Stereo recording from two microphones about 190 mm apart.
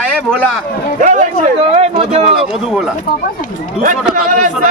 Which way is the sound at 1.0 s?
40° right (ahead or behind).